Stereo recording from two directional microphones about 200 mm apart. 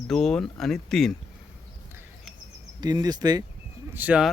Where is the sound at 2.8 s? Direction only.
20° right (ahead or behind).